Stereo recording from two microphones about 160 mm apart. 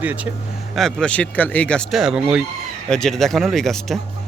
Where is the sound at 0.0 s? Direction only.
10° right (ahead or behind).